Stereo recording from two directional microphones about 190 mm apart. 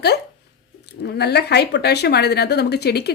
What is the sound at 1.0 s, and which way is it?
Speech, 60° left (ahead or behind).